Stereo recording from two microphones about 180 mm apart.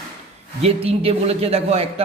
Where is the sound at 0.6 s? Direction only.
35° right (ahead or behind).